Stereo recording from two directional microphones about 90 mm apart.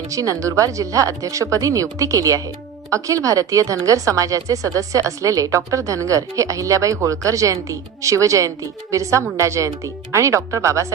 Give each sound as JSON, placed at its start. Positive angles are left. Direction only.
{"t": 0.1, "sound": "a woman's voice", "side_deg": -35}